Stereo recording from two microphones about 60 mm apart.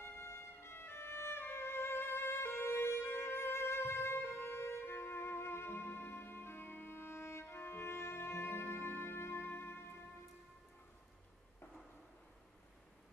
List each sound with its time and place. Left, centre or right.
0.0 s music: left